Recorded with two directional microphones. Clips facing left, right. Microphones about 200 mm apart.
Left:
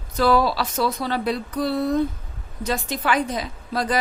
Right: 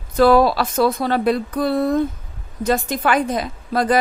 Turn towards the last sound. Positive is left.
turn(degrees=-55)  # may be behind; listen again after turning